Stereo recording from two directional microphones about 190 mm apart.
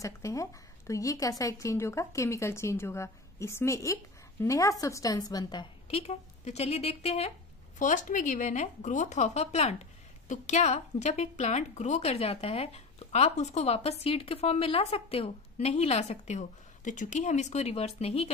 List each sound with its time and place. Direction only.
0.0 s a woman's voice: 15° left (ahead or behind); by 18.3 s 35° left (ahead or behind)